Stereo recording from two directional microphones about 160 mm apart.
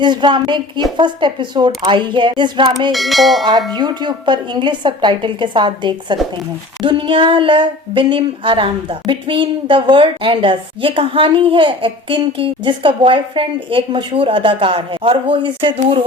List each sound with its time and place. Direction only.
0.0 s speech: 30° right (ahead or behind)
2.9 s bell: centre (ahead or behind)
3.7 s speech: 25° right (ahead or behind)